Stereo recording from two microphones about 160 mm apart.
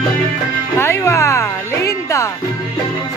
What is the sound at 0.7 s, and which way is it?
Music, 15° left (ahead or behind).